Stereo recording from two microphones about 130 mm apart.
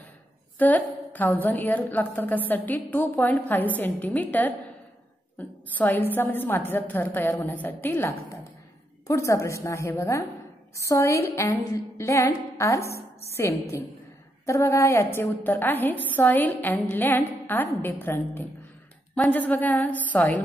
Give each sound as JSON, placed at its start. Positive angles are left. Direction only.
{"t": 0.6, "sound": "a woman's voice", "side_deg": 15}
{"t": 5.9, "sound": "a woman's voice", "side_deg": 15}